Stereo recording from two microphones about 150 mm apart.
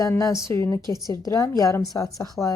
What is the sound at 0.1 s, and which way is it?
Speech, 20° left (ahead or behind).